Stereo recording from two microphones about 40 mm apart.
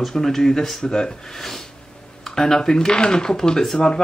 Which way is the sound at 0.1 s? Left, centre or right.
Centre.